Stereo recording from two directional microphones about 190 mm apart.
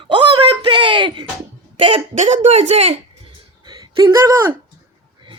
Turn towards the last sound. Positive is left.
turn(degrees=-10)  # may be behind; listen again after turning